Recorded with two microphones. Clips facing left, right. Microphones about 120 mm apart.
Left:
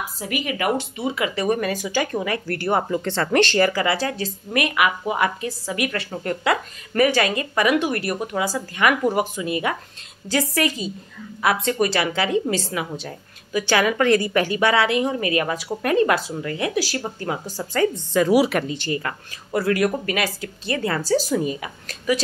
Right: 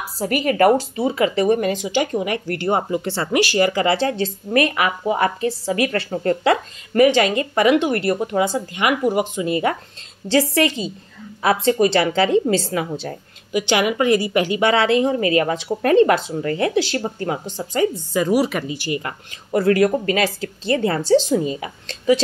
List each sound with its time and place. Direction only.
0.2 s a woman's voice: 40° right (ahead or behind); by 3.5 s 10° right (ahead or behind)
3.5 s a woman's voice: 20° right (ahead or behind)
13.5 s a woman's voice: 20° right (ahead or behind)
17.9 s a woman's voice: 5° right (ahead or behind)
19.0 s a woman's voice: 25° right (ahead or behind)